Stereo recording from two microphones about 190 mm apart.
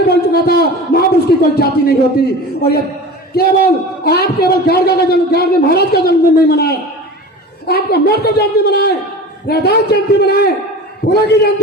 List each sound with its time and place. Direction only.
0.1 s a man's voice: 55° left (ahead or behind)